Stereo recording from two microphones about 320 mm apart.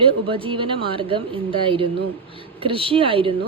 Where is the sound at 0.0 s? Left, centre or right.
Centre.